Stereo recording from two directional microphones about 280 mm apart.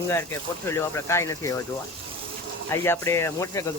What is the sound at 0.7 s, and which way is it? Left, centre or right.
Speech, centre.